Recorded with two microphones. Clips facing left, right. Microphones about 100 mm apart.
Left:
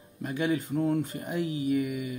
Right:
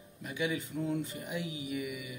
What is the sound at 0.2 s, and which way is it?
Speech, 45° left (ahead or behind).